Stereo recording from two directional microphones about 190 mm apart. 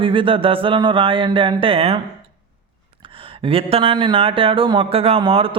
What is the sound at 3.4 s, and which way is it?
Speech, 30° right (ahead or behind).